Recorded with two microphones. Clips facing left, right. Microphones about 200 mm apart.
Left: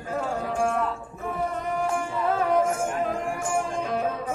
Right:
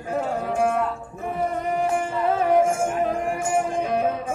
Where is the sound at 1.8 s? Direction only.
20° right (ahead or behind).